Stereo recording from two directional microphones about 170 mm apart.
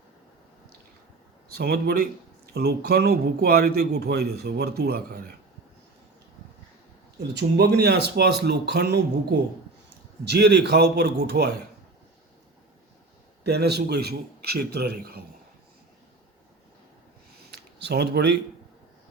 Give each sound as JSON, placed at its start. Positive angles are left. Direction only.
{"t": 1.5, "sound": "a man's voice", "side_deg": -65}
{"t": 7.2, "sound": "a man's voice", "side_deg": -75}
{"t": 10.2, "sound": "a man's voice", "side_deg": -75}
{"t": 13.4, "sound": "a man's voice", "side_deg": -75}
{"t": 17.4, "sound": "a sound", "side_deg": -80}